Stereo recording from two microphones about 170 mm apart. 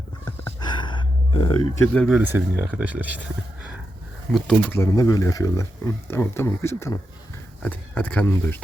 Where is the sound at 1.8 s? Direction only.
5° left (ahead or behind).